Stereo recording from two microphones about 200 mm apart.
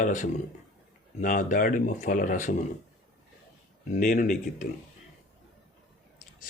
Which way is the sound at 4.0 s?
40° left (ahead or behind).